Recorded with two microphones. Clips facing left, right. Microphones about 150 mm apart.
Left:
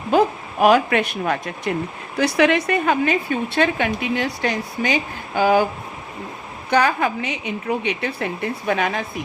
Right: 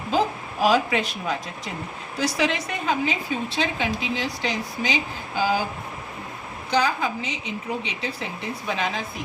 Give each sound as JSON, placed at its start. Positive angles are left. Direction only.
{"t": 0.1, "sound": "a woman's voice", "side_deg": 60}
{"t": 6.7, "sound": "a woman's voice", "side_deg": 60}